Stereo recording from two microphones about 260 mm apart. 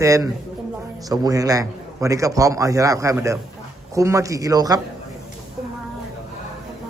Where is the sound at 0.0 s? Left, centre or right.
Centre.